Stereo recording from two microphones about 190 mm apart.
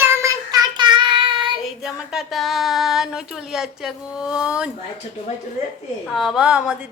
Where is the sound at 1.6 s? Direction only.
5° right (ahead or behind).